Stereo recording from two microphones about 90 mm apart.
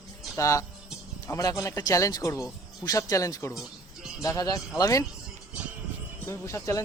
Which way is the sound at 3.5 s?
5° right (ahead or behind).